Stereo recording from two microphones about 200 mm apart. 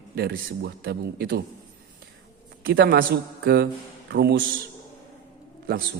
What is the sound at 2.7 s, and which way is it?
A man's voice, 50° right (ahead or behind).